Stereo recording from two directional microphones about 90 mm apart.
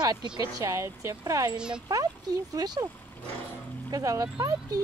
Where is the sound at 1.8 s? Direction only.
45° right (ahead or behind).